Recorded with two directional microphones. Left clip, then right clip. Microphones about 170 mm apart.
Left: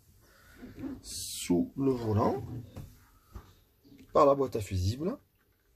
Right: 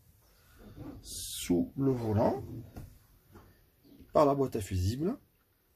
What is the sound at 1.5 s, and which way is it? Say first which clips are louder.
Speech: left 1 dB; 25° right (ahead or behind).